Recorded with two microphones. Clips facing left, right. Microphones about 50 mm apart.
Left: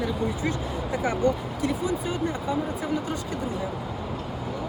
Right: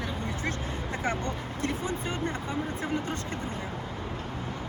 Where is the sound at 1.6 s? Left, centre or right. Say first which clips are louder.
Left 5 dB; right.